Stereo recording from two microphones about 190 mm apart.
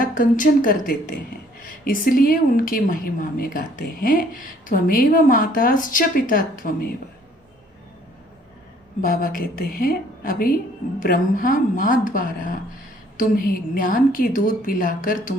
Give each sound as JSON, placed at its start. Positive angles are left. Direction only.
{"t": 0.0, "sound": "a woman's voice", "side_deg": 45}
{"t": 9.0, "sound": "a woman's voice", "side_deg": 45}